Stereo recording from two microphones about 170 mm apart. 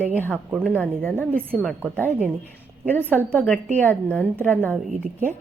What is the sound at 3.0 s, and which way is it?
Speech, 10° right (ahead or behind).